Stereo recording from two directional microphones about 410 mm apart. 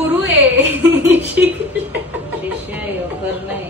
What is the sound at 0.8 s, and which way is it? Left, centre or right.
Speech, centre.